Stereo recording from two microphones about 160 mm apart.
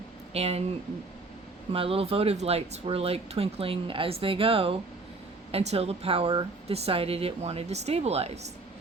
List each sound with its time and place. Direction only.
0.3 s speech: 40° right (ahead or behind)
1.7 s speech: 35° right (ahead or behind)